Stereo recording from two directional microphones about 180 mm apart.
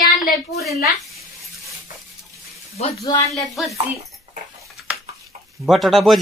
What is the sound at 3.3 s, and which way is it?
Speech, centre (ahead or behind).